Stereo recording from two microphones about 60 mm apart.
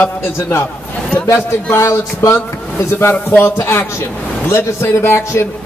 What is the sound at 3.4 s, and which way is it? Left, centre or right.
A man's voice, left.